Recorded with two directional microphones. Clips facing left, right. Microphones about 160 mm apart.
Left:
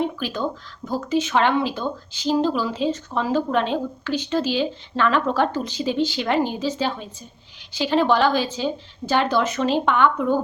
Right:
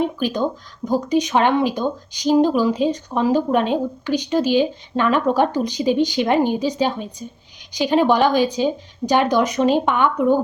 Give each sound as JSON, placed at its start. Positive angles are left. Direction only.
{"t": 0.2, "sound": "speech", "side_deg": -15}